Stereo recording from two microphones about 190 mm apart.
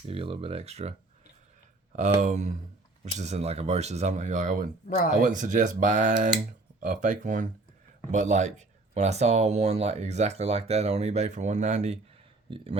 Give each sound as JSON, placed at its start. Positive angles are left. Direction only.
{"t": 0.1, "sound": "speech", "side_deg": -30}
{"t": 12.5, "sound": "speech", "side_deg": -25}